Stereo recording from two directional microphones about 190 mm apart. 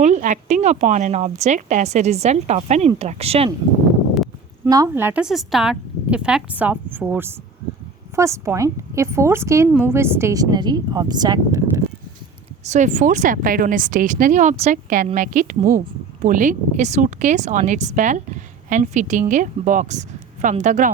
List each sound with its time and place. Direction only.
0.0 s speech: 40° right (ahead or behind)
4.1 s a sound: centre (ahead or behind)
4.7 s a woman's voice: 15° right (ahead or behind)
12.6 s speech: 40° right (ahead or behind)